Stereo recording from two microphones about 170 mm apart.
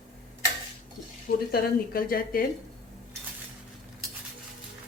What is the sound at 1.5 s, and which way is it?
Speech, 60° left (ahead or behind).